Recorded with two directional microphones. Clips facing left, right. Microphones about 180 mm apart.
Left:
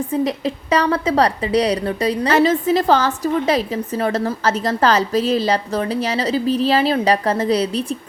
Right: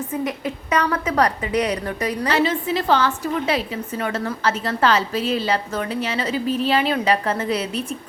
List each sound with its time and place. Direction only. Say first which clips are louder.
0.1 s a woman's voice: left 6 dB; 30° left (ahead or behind)
2.3 s a woman's voice: left 6 dB; 40° left (ahead or behind)